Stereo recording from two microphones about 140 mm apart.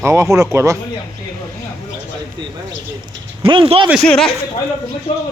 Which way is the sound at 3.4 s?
40° right (ahead or behind).